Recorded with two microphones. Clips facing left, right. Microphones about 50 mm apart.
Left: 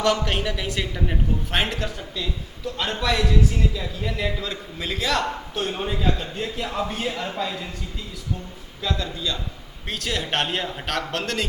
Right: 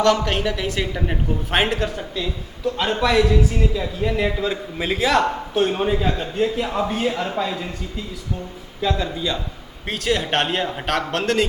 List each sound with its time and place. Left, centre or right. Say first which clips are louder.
0.0 s a man's voice: right 4 dB; centre
2.7 s a man's voice: right 6 dB; centre
8.8 s a man's voice: right 5 dB; centre
9.8 s a man's voice: right 6 dB; centre